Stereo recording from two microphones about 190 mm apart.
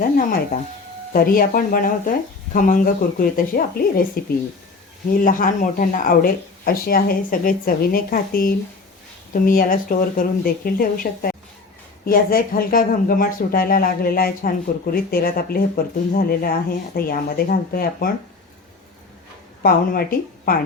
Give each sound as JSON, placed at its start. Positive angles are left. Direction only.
{"t": 1.1, "sound": "speech", "side_deg": 50}
{"t": 19.6, "sound": "speech", "side_deg": 50}